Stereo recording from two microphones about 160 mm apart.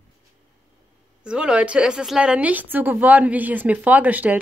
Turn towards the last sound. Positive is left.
turn(degrees=-10)  # may be behind; listen again after turning